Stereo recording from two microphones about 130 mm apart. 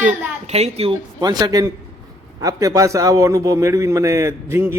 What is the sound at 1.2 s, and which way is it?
A man's voice, 30° right (ahead or behind).